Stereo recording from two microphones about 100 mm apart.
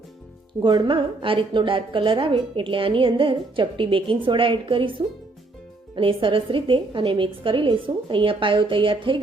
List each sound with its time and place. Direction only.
0.6 s a woman's voice: 50° right (ahead or behind)